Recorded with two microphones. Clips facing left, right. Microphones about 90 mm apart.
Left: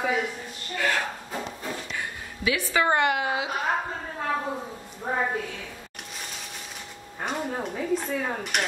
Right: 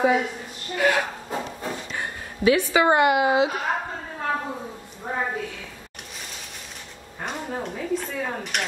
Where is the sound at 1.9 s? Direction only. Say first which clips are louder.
Right 2 dB; 35° right (ahead or behind).